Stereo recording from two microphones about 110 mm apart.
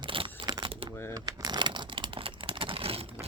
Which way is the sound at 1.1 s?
35° right (ahead or behind).